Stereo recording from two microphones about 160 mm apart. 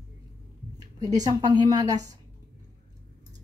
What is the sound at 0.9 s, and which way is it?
A woman's voice, 25° right (ahead or behind).